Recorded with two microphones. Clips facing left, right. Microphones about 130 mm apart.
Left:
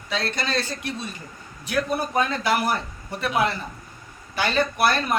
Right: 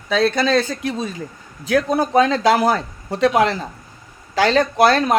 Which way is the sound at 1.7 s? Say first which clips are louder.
Right 8 dB; 90° right.